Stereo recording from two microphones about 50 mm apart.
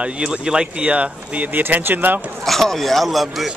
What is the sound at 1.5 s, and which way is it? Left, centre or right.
Speech, right.